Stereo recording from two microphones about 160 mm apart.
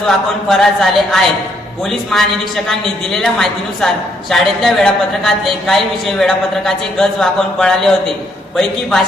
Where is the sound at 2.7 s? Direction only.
Centre (ahead or behind).